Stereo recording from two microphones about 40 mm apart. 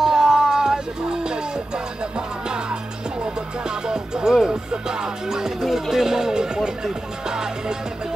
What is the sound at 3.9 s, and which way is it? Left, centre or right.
Music, centre.